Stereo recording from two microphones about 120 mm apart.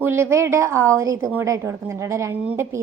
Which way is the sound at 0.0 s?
20° right (ahead or behind).